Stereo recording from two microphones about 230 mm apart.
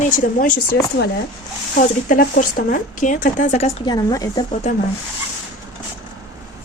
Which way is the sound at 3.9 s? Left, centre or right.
Centre.